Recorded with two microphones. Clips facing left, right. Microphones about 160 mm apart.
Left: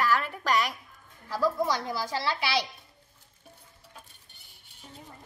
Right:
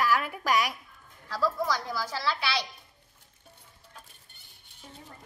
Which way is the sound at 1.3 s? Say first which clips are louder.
Left 2 dB; 20° left (ahead or behind).